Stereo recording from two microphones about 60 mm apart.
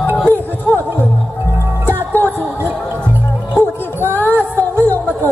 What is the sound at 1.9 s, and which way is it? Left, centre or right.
Music, left.